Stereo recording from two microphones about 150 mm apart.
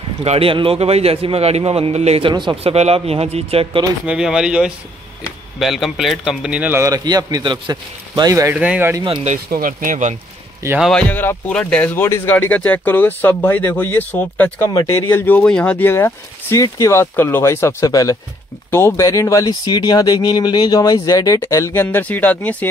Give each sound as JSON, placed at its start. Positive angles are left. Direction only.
{"t": 0.2, "sound": "a man's voice", "side_deg": -40}
{"t": 4.0, "sound": "a man's voice", "side_deg": -5}
{"t": 8.5, "sound": "speech", "side_deg": -10}
{"t": 9.5, "sound": "speech", "side_deg": -75}
{"t": 10.8, "sound": "speech", "side_deg": 5}